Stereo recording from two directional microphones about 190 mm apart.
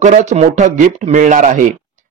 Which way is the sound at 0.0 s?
40° right (ahead or behind).